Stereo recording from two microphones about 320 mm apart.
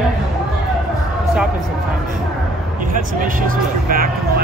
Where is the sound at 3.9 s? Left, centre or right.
Right.